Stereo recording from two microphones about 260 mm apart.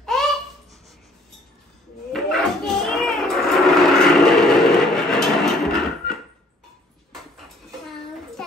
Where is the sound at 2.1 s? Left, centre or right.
Centre.